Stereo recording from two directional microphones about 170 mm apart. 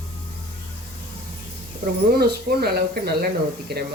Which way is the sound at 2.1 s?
65° right (ahead or behind).